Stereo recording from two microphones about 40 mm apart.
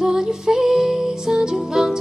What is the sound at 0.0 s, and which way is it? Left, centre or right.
Music, centre.